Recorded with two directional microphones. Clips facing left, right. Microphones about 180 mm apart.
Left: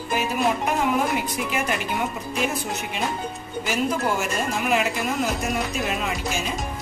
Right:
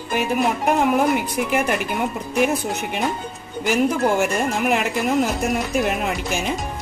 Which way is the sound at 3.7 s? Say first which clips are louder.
Right 5 dB; 60° right (ahead or behind).